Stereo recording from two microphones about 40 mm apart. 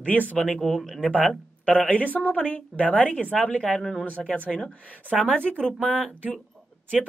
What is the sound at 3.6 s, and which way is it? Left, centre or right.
A woman's voice, centre.